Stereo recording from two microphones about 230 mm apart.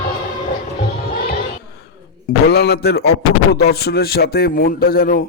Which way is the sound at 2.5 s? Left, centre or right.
Left.